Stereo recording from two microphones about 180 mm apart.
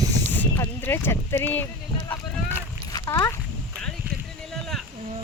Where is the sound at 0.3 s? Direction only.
10° left (ahead or behind).